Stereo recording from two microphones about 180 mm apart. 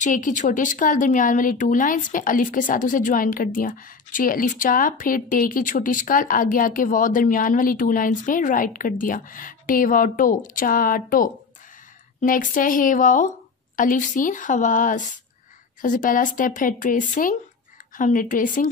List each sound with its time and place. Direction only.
0.0 s speech: 45° left (ahead or behind)